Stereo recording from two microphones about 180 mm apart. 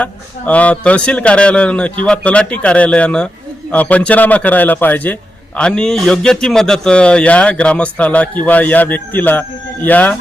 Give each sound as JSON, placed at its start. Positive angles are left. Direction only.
{"t": 0.0, "sound": "a man's voice", "side_deg": 10}